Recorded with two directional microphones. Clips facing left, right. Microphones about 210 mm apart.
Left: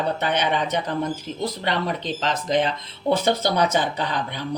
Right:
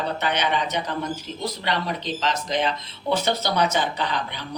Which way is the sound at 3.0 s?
30° left (ahead or behind).